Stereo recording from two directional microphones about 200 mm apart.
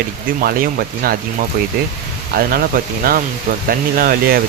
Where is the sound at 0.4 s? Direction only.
45° right (ahead or behind).